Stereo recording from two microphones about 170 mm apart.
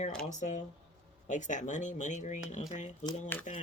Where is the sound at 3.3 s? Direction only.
10° left (ahead or behind).